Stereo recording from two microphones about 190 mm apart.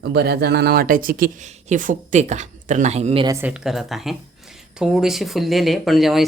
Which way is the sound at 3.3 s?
10° right (ahead or behind).